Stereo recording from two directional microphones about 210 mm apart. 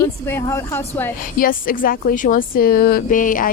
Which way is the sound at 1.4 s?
40° left (ahead or behind).